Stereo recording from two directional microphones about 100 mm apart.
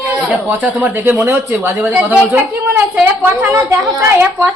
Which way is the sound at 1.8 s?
15° right (ahead or behind).